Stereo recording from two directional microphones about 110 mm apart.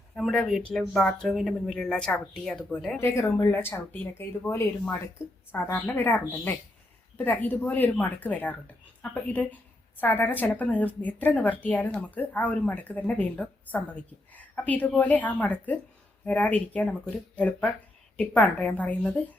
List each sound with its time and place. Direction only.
0.2 s speech: 5° left (ahead or behind)
3.0 s a woman's voice: 25° left (ahead or behind)